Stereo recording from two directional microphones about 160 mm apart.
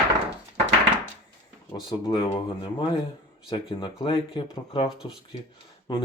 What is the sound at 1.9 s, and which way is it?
Speech, 25° left (ahead or behind).